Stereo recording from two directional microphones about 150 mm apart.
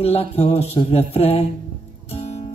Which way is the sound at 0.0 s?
45° left (ahead or behind).